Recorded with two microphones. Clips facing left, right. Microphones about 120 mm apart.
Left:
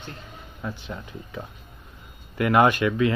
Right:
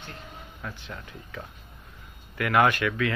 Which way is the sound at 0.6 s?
20° left (ahead or behind).